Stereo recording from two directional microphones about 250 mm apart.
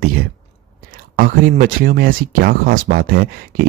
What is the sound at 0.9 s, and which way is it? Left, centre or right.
Speech, right.